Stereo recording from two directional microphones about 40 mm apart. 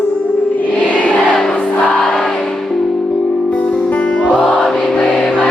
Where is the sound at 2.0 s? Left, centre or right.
Centre.